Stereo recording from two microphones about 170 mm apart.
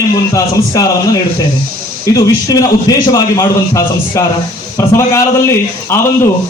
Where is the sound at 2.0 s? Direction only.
20° left (ahead or behind).